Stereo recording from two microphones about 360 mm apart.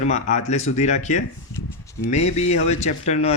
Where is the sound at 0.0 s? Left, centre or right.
Centre.